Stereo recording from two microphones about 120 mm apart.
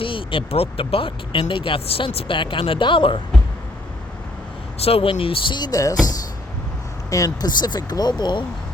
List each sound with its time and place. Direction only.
0.0 s speech: 45° left (ahead or behind)
4.8 s speech: 55° left (ahead or behind); by 8.4 s 35° left (ahead or behind)